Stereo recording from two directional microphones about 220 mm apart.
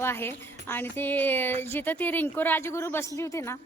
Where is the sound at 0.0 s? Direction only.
10° left (ahead or behind).